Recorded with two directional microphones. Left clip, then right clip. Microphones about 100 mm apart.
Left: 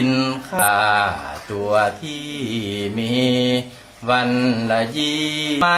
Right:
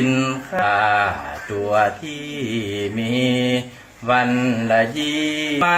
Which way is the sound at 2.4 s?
35° left (ahead or behind).